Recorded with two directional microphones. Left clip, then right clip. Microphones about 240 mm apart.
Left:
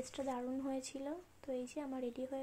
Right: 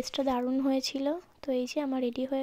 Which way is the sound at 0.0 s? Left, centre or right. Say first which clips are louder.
Right 12 dB; right.